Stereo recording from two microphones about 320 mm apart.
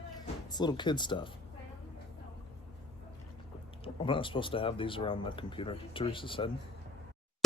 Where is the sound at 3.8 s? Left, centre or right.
Centre.